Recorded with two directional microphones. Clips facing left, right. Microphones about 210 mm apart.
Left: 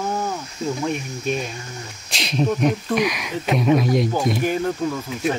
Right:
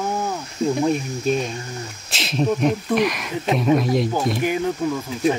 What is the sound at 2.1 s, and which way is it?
Speech, centre (ahead or behind).